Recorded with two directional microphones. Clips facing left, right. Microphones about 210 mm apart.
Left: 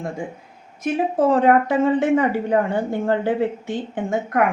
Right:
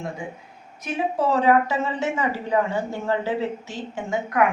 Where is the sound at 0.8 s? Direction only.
50° left (ahead or behind).